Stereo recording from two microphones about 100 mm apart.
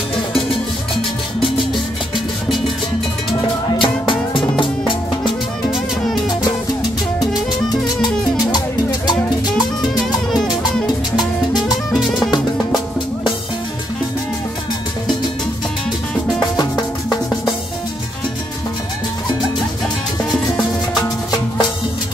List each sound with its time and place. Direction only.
3.8 s music: 55° left (ahead or behind)
8.0 s music: 45° left (ahead or behind)
11.9 s drum: centre (ahead or behind)